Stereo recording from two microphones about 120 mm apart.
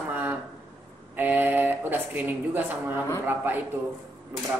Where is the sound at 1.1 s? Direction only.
15° right (ahead or behind).